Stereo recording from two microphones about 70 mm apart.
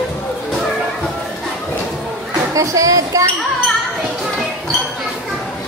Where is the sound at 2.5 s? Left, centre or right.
Right.